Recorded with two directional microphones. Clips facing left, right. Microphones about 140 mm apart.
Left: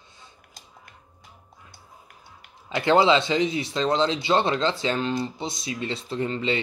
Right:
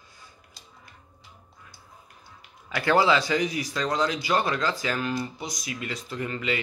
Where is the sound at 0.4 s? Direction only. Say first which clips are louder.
Left 2 dB; 55° left (ahead or behind).